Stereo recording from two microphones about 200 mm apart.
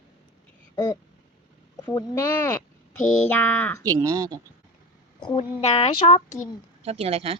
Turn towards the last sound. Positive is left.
turn(degrees=-30)  # may be behind; listen again after turning